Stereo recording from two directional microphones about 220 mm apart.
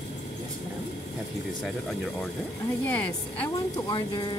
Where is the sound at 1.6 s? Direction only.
Centre (ahead or behind).